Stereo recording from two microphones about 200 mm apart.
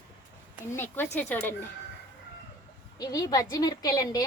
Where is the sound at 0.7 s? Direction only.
10° left (ahead or behind).